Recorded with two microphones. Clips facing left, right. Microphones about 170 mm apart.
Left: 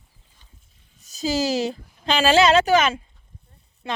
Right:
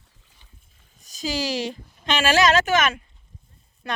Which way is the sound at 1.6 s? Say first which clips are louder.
Left 3 dB; 30° left (ahead or behind).